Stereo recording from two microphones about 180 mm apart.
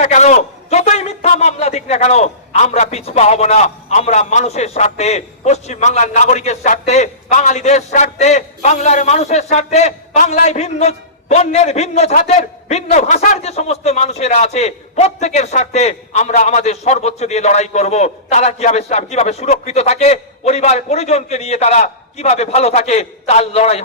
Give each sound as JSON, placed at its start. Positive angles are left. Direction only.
{"t": 0.0, "sound": "a man's voice", "side_deg": 40}